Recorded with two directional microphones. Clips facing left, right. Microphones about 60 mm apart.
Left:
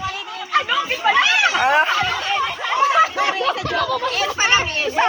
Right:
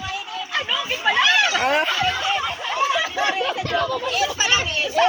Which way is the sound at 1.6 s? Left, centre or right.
Centre.